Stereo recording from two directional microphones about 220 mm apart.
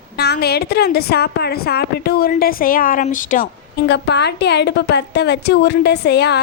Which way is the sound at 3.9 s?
50° left (ahead or behind).